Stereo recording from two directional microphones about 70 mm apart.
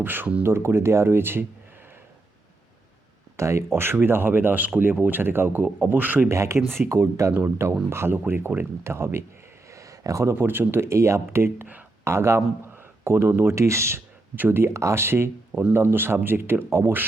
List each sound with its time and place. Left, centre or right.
0.0 s speech: right
3.3 s speech: right
6.2 s speech: right
9.7 s a sound: right
10.3 s speech: right
14.3 s speech: right